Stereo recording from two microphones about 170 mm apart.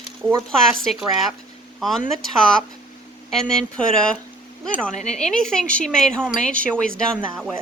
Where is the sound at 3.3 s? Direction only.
5° left (ahead or behind).